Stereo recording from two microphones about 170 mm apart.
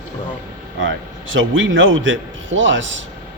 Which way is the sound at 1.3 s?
90° right.